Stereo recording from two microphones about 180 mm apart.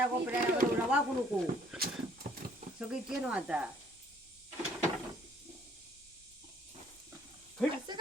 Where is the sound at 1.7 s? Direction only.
5° right (ahead or behind).